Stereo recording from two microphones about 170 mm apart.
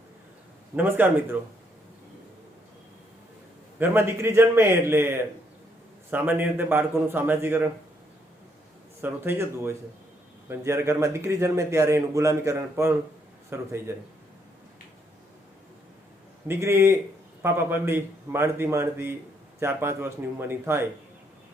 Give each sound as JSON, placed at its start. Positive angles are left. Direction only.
{"t": 0.8, "sound": "a man's voice", "side_deg": -10}
{"t": 3.8, "sound": "a man's voice", "side_deg": -15}
{"t": 9.0, "sound": "a man's voice", "side_deg": -15}
{"t": 16.5, "sound": "a man's voice", "side_deg": -15}